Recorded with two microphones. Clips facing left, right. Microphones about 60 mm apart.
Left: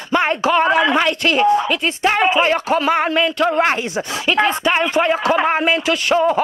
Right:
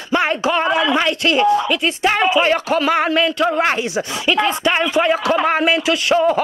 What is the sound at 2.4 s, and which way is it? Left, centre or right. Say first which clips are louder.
Speech: even; centre.